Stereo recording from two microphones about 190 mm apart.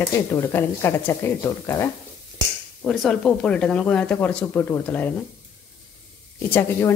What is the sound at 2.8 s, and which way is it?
Speech, centre (ahead or behind).